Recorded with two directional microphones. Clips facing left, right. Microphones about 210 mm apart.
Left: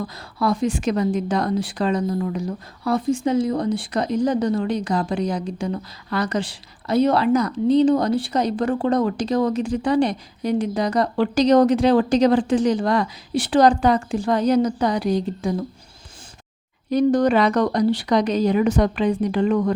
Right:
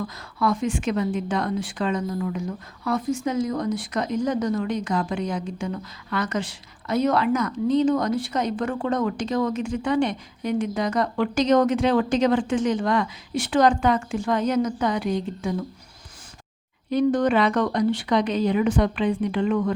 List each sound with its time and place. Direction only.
0.3 s a woman's voice: 35° left (ahead or behind)
16.9 s a woman's voice: 40° left (ahead or behind)